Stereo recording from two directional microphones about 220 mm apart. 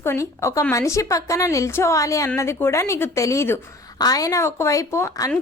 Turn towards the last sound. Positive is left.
turn(degrees=15)  # may be behind; listen again after turning